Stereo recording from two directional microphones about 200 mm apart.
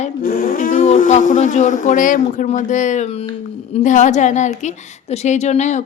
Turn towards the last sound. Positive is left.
turn(degrees=35)  # may be behind; listen again after turning